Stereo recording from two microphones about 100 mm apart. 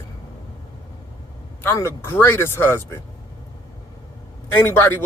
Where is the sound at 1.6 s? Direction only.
25° left (ahead or behind).